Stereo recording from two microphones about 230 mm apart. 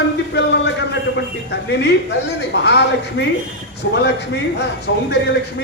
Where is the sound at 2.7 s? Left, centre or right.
Left.